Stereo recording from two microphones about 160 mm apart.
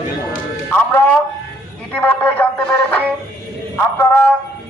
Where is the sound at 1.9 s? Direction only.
10° left (ahead or behind).